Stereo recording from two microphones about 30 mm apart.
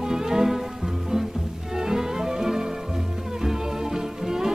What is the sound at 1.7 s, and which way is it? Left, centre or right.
Music, centre.